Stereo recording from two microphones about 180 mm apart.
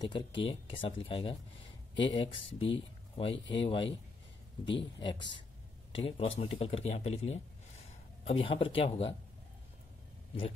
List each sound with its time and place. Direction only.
0.0 s speech: 25° left (ahead or behind)